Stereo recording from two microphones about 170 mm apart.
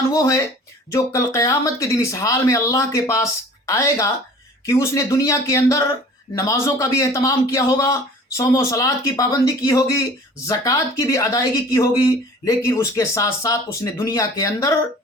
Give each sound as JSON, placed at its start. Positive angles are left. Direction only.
{"t": 0.1, "sound": "speech", "side_deg": 20}